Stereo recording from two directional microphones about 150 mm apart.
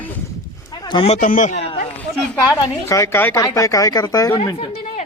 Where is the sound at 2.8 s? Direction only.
20° left (ahead or behind).